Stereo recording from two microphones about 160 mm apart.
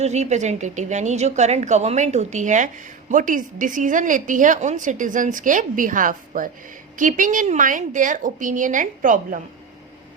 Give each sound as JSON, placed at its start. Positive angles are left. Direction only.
{"t": 0.0, "sound": "a woman's voice", "side_deg": -45}